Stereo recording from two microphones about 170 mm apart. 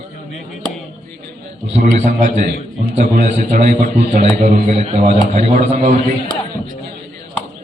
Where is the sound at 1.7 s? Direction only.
45° right (ahead or behind).